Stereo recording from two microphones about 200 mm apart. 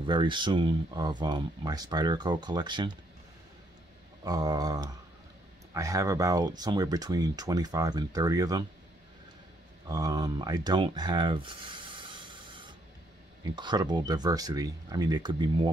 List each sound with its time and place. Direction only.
0.0 s speech: 25° right (ahead or behind)
4.2 s speech: 20° right (ahead or behind)
9.8 s speech: 20° right (ahead or behind)